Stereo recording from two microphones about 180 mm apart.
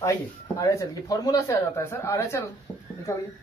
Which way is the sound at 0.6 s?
20° left (ahead or behind).